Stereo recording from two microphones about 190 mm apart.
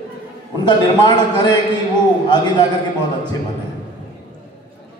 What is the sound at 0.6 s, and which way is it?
A man's voice, 25° left (ahead or behind).